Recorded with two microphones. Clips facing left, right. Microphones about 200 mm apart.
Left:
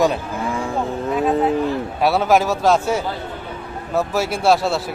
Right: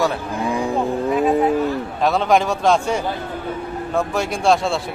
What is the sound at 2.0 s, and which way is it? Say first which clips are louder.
Speech: left 1 dB; 10° left (ahead or behind).